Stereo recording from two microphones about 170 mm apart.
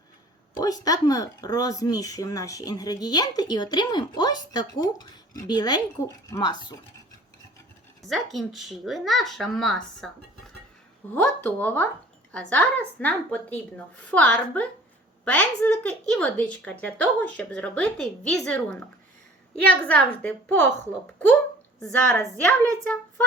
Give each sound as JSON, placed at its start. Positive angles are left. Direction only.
{"t": 0.6, "sound": "speech", "side_deg": 20}
{"t": 8.0, "sound": "a woman's voice", "side_deg": 0}
{"t": 21.8, "sound": "a woman's voice", "side_deg": 10}